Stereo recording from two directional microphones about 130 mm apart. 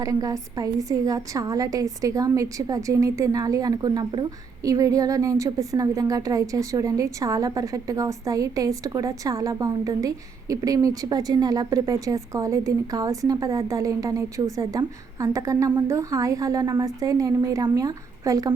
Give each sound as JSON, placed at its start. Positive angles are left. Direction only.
{"t": 0.0, "sound": "a woman's voice", "side_deg": -25}